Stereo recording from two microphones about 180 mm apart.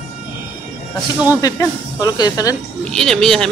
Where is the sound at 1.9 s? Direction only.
20° left (ahead or behind).